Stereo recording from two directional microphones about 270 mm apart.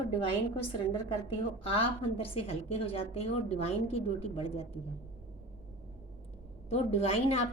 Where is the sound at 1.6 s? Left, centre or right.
Left.